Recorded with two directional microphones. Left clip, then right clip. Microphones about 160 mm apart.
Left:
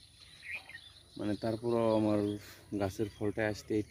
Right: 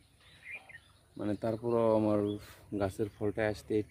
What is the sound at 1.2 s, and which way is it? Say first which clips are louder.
Speech: right 1 dB; 5° right (ahead or behind).